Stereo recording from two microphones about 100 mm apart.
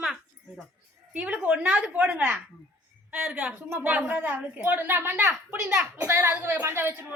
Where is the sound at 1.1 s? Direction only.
15° right (ahead or behind).